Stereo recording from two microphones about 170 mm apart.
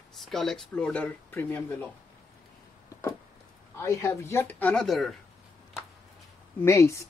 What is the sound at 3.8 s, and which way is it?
Speech, 20° left (ahead or behind).